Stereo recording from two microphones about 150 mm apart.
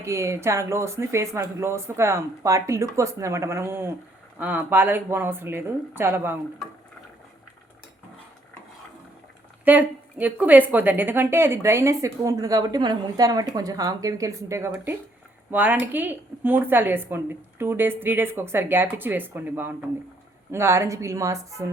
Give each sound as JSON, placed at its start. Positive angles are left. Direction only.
{"t": 0.0, "sound": "a woman's voice", "side_deg": -20}
{"t": 9.6, "sound": "a woman's voice", "side_deg": -10}